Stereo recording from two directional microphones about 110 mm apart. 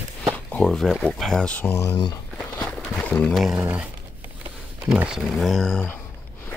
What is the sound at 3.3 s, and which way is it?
Speech, centre (ahead or behind).